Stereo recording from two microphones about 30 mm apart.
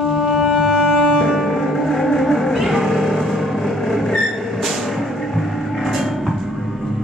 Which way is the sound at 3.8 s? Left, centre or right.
Centre.